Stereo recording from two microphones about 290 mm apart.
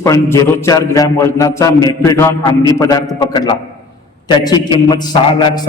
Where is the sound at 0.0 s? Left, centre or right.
Centre.